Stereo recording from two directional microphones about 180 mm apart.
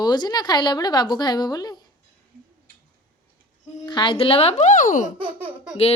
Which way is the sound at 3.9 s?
25° left (ahead or behind).